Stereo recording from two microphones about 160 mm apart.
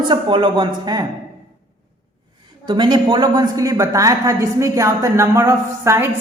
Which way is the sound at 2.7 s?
30° right (ahead or behind).